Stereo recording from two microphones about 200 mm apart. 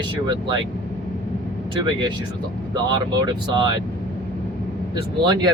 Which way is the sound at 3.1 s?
20° right (ahead or behind).